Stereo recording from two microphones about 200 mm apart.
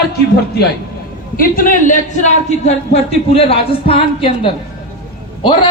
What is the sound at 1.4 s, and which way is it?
A man's voice, 45° left (ahead or behind).